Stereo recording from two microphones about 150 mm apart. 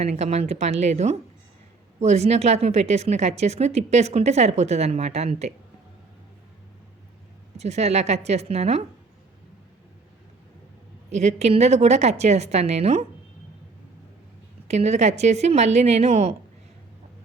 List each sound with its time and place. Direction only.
0.0 s a woman's voice: 45° right (ahead or behind)
7.5 s a woman's voice: 45° right (ahead or behind)
11.1 s a woman's voice: 50° right (ahead or behind)
14.7 s a woman's voice: 50° right (ahead or behind)